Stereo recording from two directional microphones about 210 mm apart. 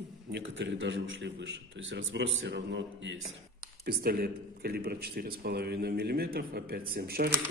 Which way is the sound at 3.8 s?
45° right (ahead or behind).